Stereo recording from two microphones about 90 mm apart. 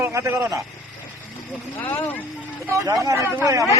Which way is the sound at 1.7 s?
25° left (ahead or behind).